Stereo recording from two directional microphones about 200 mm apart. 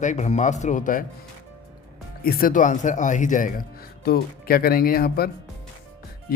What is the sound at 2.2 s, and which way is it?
Speech, 45° left (ahead or behind).